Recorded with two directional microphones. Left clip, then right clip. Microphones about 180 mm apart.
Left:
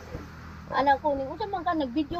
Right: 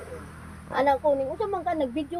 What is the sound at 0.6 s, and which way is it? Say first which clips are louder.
Speech: right 1 dB; 20° right (ahead or behind).